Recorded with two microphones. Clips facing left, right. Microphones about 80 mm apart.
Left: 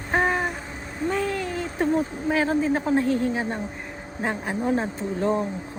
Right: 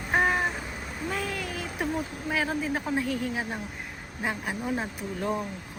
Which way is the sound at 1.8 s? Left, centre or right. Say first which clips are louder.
Left 8 dB; left.